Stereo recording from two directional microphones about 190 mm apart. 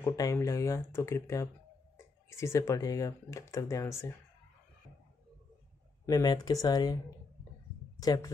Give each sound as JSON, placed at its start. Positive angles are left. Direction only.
{"t": 0.0, "sound": "speech", "side_deg": 15}
{"t": 6.0, "sound": "speech", "side_deg": 20}
{"t": 8.0, "sound": "speech", "side_deg": 20}